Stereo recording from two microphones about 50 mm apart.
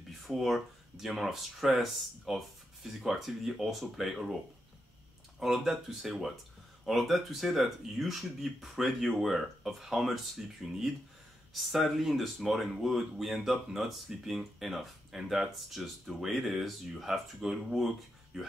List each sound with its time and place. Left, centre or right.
0.3 s speech: centre
5.4 s speech: centre